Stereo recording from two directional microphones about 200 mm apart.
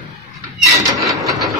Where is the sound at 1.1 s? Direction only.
15° right (ahead or behind).